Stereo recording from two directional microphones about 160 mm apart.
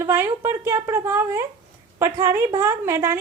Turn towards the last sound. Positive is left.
turn(degrees=-15)  # may be behind; listen again after turning